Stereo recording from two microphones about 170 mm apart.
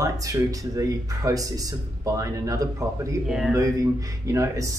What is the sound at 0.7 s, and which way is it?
Speech, 20° right (ahead or behind).